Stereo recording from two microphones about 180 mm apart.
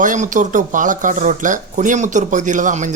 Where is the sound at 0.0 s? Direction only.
45° right (ahead or behind).